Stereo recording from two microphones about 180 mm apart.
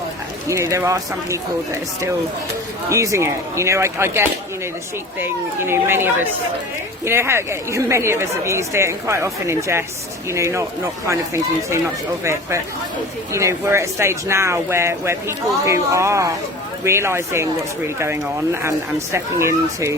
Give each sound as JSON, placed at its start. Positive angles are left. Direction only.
{"t": 0.4, "sound": "speech", "side_deg": -15}
{"t": 2.9, "sound": "speech", "side_deg": -15}
{"t": 12.2, "sound": "speech", "side_deg": -15}